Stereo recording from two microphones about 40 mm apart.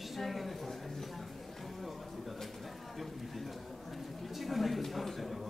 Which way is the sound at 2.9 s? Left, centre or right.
Centre.